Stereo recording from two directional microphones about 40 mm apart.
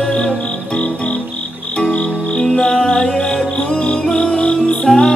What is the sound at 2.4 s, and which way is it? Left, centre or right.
Music, left.